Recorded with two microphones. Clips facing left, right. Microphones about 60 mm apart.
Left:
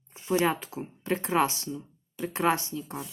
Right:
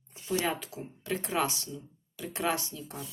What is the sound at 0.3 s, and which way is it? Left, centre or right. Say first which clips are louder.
Speech: left 5 dB; left.